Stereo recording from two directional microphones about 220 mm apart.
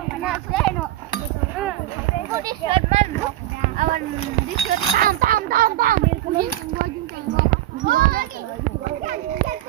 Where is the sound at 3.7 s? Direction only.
40° right (ahead or behind).